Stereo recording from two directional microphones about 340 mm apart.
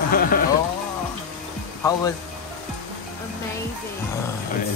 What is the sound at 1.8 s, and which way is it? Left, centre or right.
Speech, centre.